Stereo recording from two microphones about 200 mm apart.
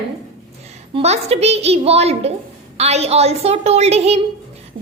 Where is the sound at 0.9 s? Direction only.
30° right (ahead or behind).